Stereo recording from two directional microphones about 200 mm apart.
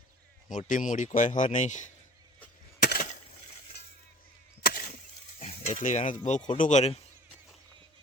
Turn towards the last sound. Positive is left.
turn(degrees=30)  # may be behind; listen again after turning